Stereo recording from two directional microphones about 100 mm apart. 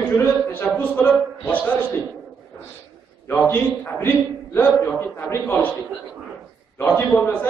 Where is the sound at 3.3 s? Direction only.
20° left (ahead or behind).